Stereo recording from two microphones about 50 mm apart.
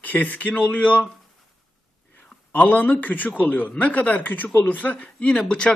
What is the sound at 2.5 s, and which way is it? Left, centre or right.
A man's voice, left.